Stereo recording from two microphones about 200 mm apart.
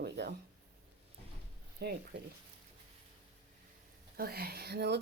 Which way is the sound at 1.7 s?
55° right (ahead or behind).